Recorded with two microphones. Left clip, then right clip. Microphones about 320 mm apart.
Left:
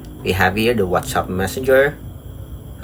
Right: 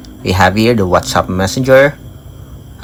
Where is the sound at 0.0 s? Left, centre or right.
Centre.